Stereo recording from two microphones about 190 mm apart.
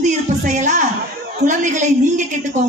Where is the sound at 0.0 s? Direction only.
40° right (ahead or behind).